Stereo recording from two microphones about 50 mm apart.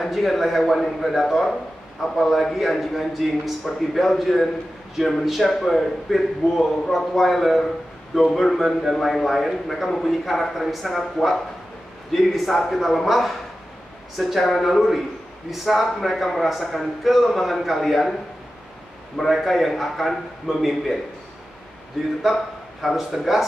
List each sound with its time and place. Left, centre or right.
0.0 s a man's voice: centre
19.1 s a man's voice: centre
22.2 s speech: centre